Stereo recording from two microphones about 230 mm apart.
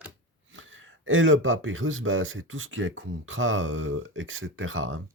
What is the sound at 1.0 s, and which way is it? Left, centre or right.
Speech, right.